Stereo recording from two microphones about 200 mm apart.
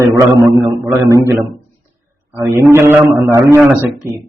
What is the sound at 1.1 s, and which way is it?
A man's voice, 15° right (ahead or behind).